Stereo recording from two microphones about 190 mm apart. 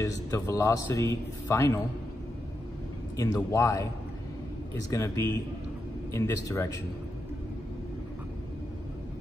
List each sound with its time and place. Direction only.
0.0 s a man's voice: 15° left (ahead or behind)
3.3 s a man's voice: 15° left (ahead or behind)
4.9 s a man's voice: 15° left (ahead or behind)